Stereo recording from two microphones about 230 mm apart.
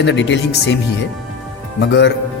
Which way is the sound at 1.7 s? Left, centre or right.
Left.